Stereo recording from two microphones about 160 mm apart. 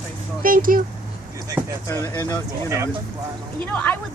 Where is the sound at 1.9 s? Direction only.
15° left (ahead or behind).